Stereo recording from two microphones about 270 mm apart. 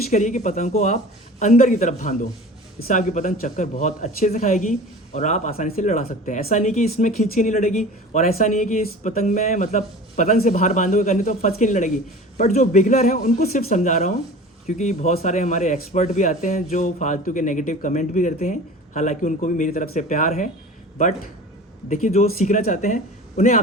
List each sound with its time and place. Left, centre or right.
0.1 s speech: left
21.8 s speech: left